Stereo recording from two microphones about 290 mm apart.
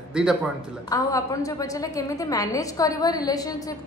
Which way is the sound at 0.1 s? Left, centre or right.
Centre.